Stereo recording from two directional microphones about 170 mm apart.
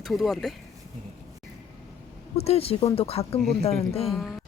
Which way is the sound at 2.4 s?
35° left (ahead or behind).